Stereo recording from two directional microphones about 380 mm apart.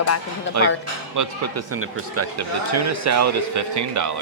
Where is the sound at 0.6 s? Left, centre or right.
Right.